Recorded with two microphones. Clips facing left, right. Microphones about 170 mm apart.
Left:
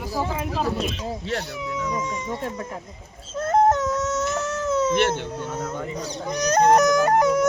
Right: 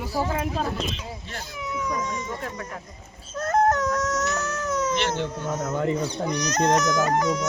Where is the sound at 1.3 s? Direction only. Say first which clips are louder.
Left 10 dB; 75° left (ahead or behind).